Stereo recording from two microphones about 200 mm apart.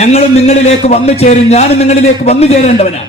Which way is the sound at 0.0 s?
35° left (ahead or behind).